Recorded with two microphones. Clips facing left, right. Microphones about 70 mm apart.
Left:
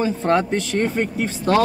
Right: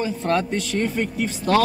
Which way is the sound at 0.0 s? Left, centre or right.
Left.